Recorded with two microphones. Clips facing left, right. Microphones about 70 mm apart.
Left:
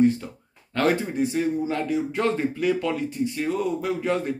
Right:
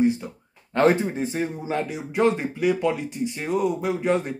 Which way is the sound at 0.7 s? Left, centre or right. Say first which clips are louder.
Right 3 dB; right.